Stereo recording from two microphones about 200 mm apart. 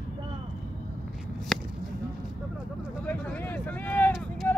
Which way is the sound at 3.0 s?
10° left (ahead or behind).